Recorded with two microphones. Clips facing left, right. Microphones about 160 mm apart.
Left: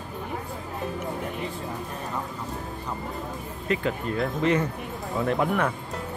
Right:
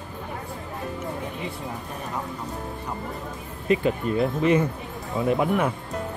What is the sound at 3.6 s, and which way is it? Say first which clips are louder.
Speech: right 5 dB; 20° right (ahead or behind).